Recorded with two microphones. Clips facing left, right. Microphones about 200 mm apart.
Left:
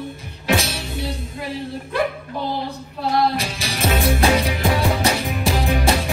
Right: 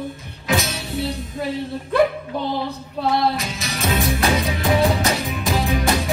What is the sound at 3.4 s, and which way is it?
Music, 30° left (ahead or behind).